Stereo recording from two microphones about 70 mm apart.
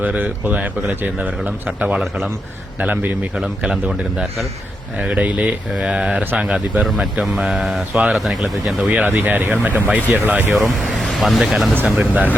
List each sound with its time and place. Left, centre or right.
0.0 s a man's voice: right
2.0 s speech: centre
2.7 s a man's voice: right
3.7 s speech: centre
6.8 s speech: centre
8.8 s a man's voice: right
10.5 s speech: centre
11.9 s a man's voice: right